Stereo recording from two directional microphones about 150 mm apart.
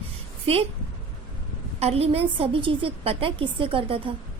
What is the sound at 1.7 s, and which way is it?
A woman's voice, 45° right (ahead or behind).